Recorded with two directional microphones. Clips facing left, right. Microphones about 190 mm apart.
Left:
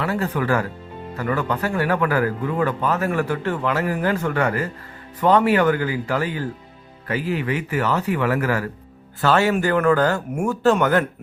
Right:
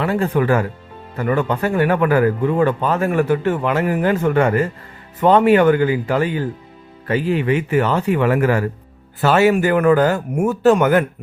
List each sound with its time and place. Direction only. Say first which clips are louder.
0.0 s speech: right 5 dB; 25° right (ahead or behind)